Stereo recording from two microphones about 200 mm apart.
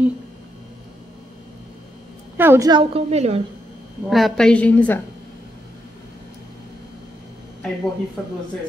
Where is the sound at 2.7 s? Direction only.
30° right (ahead or behind).